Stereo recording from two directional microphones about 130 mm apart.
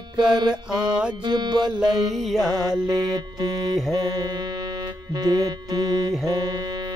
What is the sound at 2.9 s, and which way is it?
Music, 30° right (ahead or behind).